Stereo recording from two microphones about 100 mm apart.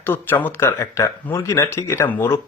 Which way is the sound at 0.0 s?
20° left (ahead or behind).